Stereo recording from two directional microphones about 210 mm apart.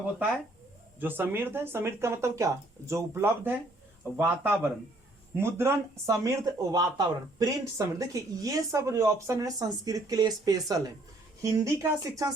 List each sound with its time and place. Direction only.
0.9 s speech: 10° right (ahead or behind)